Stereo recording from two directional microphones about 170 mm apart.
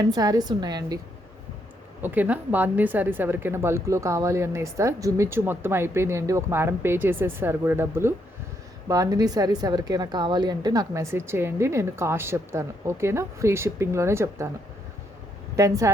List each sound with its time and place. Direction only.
0.0 s a woman's voice: 20° right (ahead or behind)
2.0 s a woman's voice: 10° right (ahead or behind)
15.5 s a woman's voice: 20° right (ahead or behind)